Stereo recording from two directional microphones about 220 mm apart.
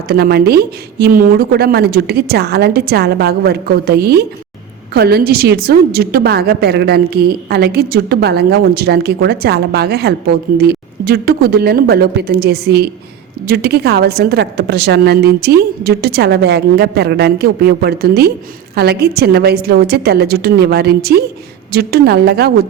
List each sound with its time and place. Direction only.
0.1 s a woman's voice: 45° right (ahead or behind)